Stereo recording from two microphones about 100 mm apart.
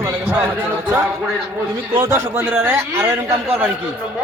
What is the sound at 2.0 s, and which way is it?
A man's voice, 25° right (ahead or behind).